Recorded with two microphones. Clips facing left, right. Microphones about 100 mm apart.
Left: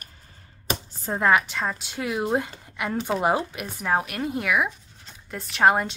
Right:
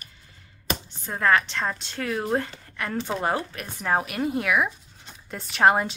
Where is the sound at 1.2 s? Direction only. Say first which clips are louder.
Left 1 dB; 10° left (ahead or behind).